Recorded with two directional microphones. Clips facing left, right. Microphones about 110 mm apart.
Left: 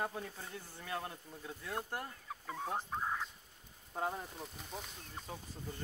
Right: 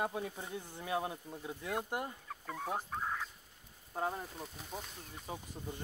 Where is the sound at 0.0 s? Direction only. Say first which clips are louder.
Right 3 dB; 15° right (ahead or behind).